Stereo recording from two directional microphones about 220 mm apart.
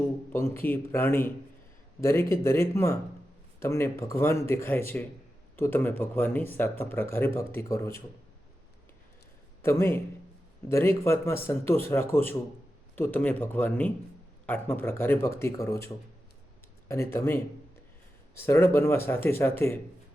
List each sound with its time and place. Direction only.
0.3 s speech: 10° left (ahead or behind)
9.6 s a man's voice: 10° left (ahead or behind)
16.9 s speech: 10° left (ahead or behind)